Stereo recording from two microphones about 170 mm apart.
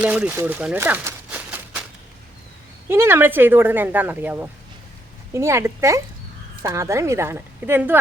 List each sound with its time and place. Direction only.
0.0 s speech: 10° right (ahead or behind)
2.9 s speech: 15° right (ahead or behind)